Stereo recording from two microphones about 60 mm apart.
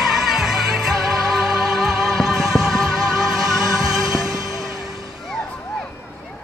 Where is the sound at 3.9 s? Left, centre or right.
Right.